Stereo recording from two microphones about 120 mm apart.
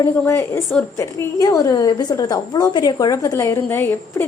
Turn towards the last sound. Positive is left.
turn(degrees=20)  # may be behind; listen again after turning